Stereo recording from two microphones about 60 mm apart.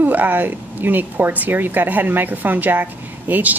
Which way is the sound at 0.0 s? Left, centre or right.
Right.